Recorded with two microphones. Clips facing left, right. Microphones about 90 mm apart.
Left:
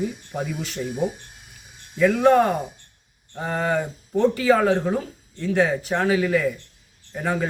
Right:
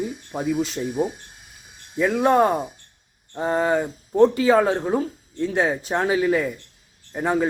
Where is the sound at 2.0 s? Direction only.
25° right (ahead or behind).